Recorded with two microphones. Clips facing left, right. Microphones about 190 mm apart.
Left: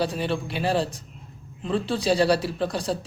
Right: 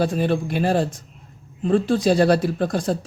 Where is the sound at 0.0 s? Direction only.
50° right (ahead or behind).